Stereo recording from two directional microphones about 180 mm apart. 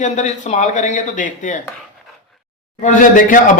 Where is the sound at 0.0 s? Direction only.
40° left (ahead or behind).